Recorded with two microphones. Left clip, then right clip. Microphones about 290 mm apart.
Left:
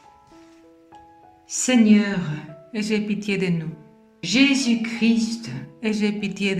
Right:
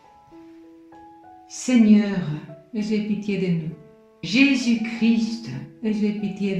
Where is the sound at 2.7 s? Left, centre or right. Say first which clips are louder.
Left 2 dB; left.